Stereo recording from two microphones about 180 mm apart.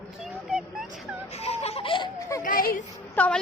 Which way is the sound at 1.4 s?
35° left (ahead or behind).